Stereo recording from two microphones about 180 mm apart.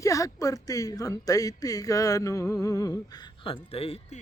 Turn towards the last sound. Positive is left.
turn(degrees=35)  # may be behind; listen again after turning